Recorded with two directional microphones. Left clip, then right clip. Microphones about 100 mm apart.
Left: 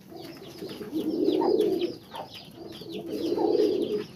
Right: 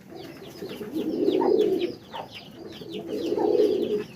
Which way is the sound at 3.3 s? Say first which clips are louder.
Right 2 dB; 5° left (ahead or behind).